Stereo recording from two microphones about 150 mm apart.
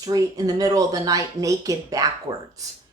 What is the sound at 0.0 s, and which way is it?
Speech, 25° right (ahead or behind).